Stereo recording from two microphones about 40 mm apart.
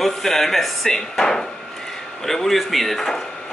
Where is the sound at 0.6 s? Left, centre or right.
Centre.